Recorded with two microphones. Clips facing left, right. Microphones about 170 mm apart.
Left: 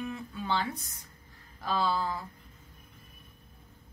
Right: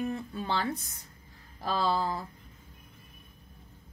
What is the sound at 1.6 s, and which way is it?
Speech, 35° right (ahead or behind).